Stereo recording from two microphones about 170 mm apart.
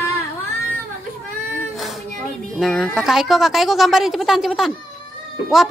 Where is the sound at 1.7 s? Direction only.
Centre (ahead or behind).